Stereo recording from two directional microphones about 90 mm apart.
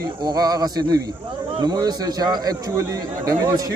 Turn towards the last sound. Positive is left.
turn(degrees=-40)  # may be behind; listen again after turning